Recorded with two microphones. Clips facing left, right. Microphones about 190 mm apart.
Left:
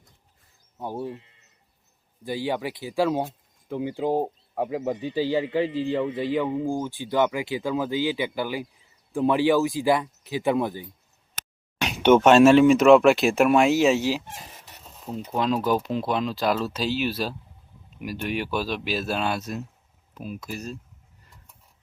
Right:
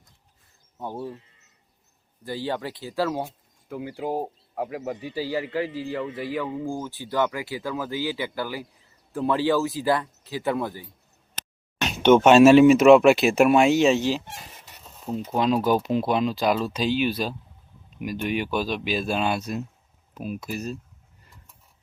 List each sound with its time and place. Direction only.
0.8 s speech: 10° left (ahead or behind)
2.2 s speech: 15° left (ahead or behind)
11.8 s a sound: 10° left (ahead or behind)
12.2 s speech: 5° right (ahead or behind)
15.4 s speech: 5° right (ahead or behind)
20.1 s speech: 15° right (ahead or behind)